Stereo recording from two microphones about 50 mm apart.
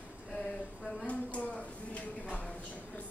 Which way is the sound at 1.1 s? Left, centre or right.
Left.